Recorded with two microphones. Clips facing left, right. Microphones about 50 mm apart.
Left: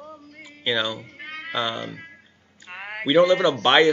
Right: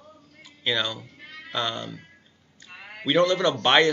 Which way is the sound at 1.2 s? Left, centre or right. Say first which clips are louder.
Left 8 dB; left.